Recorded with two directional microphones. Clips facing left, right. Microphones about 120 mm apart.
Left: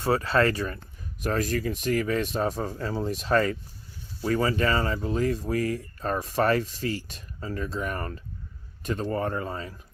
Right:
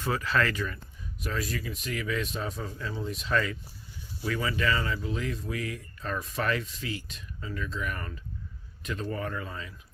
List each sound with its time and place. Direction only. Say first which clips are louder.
0.0 s speech: left 5 dB; 30° left (ahead or behind)